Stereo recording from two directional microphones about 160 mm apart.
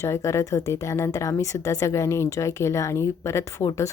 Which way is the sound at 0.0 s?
20° left (ahead or behind).